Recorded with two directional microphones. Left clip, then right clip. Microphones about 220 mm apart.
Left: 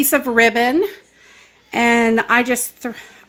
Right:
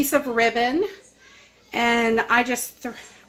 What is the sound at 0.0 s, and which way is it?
Speech, 55° left (ahead or behind).